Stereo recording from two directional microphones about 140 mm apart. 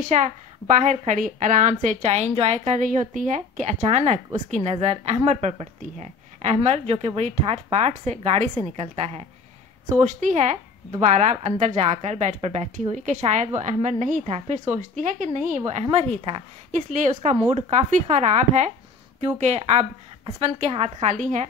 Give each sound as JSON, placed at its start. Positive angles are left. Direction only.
{"t": 0.1, "sound": "a woman's voice", "side_deg": -60}
{"t": 16.7, "sound": "a woman's voice", "side_deg": -65}